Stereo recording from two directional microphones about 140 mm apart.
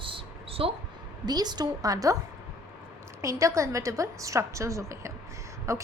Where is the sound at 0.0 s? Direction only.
40° right (ahead or behind).